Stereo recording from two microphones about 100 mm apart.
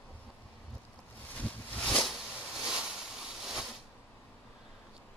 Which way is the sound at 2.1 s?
5° right (ahead or behind).